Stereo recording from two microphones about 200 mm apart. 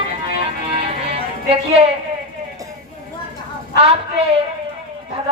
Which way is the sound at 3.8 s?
30° right (ahead or behind).